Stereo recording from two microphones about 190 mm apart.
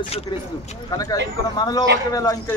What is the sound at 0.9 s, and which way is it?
Speech, 20° left (ahead or behind).